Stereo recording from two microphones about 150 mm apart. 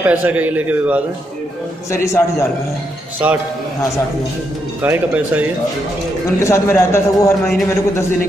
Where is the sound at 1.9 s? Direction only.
20° left (ahead or behind).